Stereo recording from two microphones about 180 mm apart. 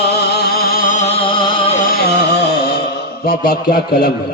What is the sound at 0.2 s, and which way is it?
Music, 60° left (ahead or behind).